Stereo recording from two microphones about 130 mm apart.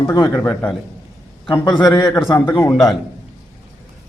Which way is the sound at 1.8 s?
25° left (ahead or behind).